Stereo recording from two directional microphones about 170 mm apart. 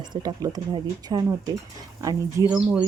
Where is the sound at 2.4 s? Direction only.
20° right (ahead or behind).